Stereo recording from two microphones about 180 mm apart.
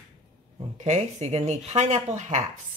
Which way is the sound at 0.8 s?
40° right (ahead or behind).